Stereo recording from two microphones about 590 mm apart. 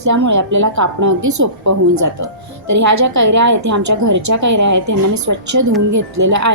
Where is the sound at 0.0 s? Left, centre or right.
Right.